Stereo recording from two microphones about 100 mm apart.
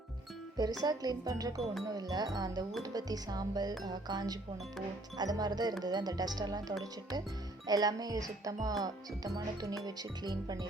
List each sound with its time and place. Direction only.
0.8 s music: 40° right (ahead or behind)
5.1 s speech: 45° right (ahead or behind)
7.7 s music: 40° right (ahead or behind)